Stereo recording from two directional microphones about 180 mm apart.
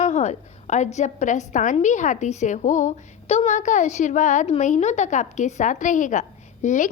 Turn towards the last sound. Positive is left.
turn(degrees=40)  # may be behind; listen again after turning